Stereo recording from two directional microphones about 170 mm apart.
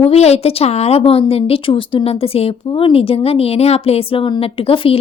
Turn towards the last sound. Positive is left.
turn(degrees=30)  # may be behind; listen again after turning